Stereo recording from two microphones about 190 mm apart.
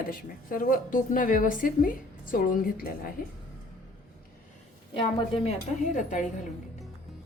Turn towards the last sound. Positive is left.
turn(degrees=40)  # may be behind; listen again after turning